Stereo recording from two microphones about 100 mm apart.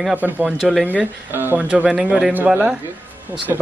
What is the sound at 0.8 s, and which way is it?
Speech, 20° right (ahead or behind).